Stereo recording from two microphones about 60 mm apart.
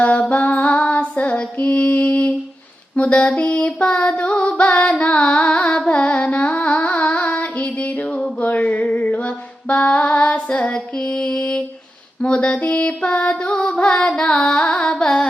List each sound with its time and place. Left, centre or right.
0.0 s female singing: left
2.9 s music: left
12.2 s mantra: centre